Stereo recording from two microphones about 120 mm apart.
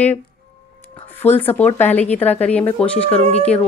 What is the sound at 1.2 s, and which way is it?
A woman's voice, 15° left (ahead or behind).